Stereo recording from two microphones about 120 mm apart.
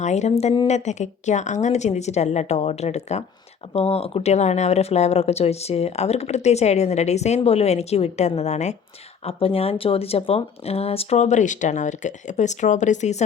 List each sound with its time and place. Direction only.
0.0 s speech: 70° left (ahead or behind)
3.7 s speech: 55° left (ahead or behind); by 8.7 s 70° left (ahead or behind)
9.2 s speech: 55° left (ahead or behind); by 13.2 s 75° left (ahead or behind)